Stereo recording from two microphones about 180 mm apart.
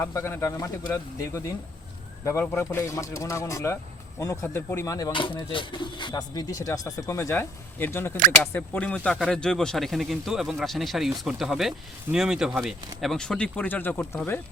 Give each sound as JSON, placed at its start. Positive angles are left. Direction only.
{"t": 0.0, "sound": "speech", "side_deg": 15}